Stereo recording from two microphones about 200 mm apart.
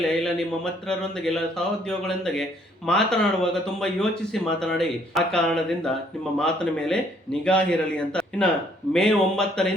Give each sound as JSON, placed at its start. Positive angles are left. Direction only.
{"t": 0.2, "sound": "speech", "side_deg": 5}